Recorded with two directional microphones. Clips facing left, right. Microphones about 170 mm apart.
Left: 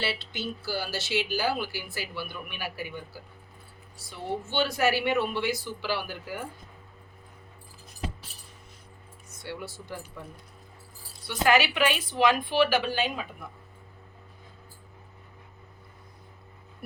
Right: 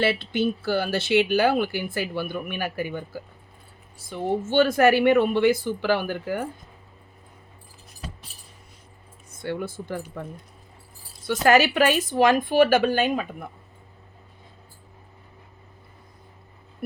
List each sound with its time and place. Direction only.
0.0 s speech: 55° right (ahead or behind)
9.4 s speech: 55° right (ahead or behind)
11.3 s speech: 45° right (ahead or behind)